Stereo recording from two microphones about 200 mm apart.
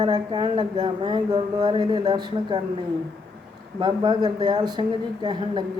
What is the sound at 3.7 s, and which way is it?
Speech, 20° right (ahead or behind).